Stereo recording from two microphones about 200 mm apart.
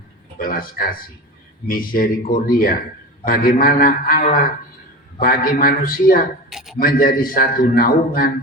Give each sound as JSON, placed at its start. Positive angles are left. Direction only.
{"t": 0.3, "sound": "a man's voice", "side_deg": 45}
{"t": 6.5, "sound": "a sound", "side_deg": 0}
{"t": 6.7, "sound": "a man's voice", "side_deg": 45}